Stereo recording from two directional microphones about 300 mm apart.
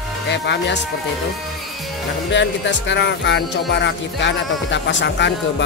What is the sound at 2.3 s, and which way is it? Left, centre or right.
Speech, left.